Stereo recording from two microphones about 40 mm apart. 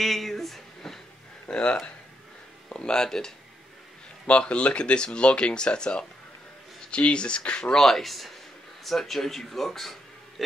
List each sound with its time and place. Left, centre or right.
0.0 s a sound: centre
1.5 s speech: left
4.3 s speech: left
7.8 s speech: centre